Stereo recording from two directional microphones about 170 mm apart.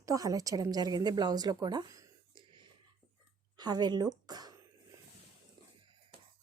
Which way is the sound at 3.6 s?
25° right (ahead or behind).